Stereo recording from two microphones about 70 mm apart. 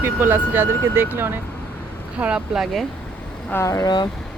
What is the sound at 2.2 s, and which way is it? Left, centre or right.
Speech, centre.